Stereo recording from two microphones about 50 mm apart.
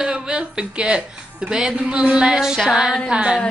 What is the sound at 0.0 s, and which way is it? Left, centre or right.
Speech, centre.